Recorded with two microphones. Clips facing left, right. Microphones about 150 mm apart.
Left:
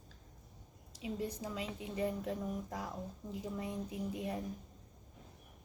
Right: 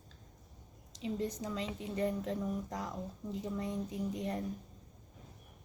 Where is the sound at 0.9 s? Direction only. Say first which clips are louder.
Right 3 dB; 10° left (ahead or behind).